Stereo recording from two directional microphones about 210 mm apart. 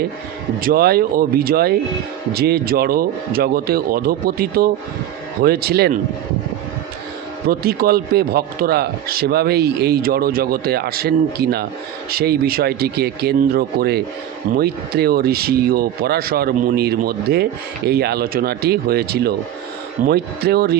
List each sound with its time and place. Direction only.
0.6 s speech: 45° right (ahead or behind)
7.4 s speech: 45° right (ahead or behind)